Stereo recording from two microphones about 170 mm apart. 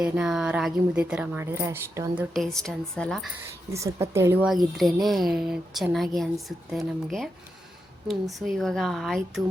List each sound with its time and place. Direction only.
0.0 s a woman's voice: 5° right (ahead or behind)
2.3 s speech: centre (ahead or behind)
3.7 s a woman's voice: 20° right (ahead or behind)
4.4 s speech: centre (ahead or behind)